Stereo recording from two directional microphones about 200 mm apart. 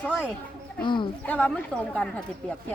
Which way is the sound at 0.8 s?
25° left (ahead or behind).